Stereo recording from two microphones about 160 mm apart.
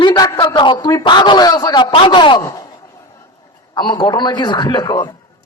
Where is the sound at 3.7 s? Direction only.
25° left (ahead or behind).